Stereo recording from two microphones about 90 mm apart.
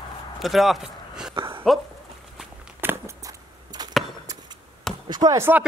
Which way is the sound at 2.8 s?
25° right (ahead or behind).